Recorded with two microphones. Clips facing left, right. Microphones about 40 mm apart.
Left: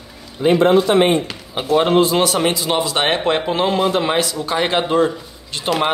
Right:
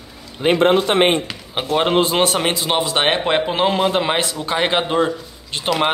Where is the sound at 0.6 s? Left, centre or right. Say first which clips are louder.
Left 1 dB; right.